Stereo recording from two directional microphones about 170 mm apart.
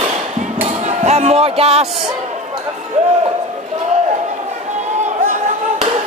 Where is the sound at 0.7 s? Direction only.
40° right (ahead or behind).